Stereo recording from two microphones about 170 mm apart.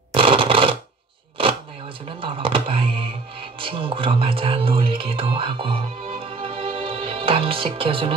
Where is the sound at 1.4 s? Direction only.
30° right (ahead or behind).